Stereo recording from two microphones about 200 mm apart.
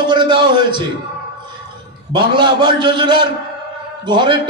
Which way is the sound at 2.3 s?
20° right (ahead or behind).